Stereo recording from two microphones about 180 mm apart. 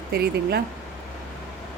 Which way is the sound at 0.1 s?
60° right (ahead or behind).